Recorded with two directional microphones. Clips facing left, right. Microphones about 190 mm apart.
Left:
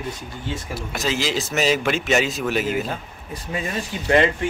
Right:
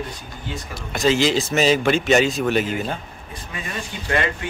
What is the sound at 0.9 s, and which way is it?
Speech, 5° left (ahead or behind).